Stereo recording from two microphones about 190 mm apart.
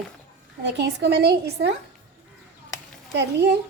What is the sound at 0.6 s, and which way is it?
A woman's voice, 65° right (ahead or behind).